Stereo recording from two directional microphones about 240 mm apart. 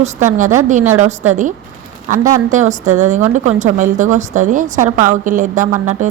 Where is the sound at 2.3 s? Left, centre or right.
Right.